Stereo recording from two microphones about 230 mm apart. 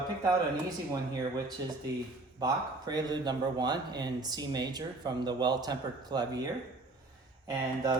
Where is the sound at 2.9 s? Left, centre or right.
Centre.